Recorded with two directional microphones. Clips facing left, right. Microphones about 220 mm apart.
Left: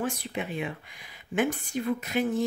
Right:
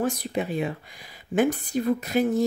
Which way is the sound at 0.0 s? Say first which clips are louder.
Right 5 dB; 40° right (ahead or behind).